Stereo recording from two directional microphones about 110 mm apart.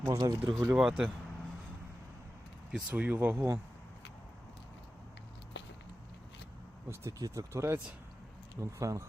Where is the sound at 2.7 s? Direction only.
15° right (ahead or behind).